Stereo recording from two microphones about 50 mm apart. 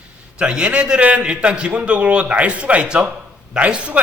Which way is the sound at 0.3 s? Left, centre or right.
Right.